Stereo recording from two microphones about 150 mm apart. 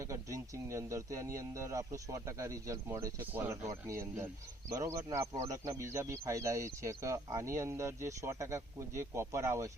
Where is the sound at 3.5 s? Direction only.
25° right (ahead or behind).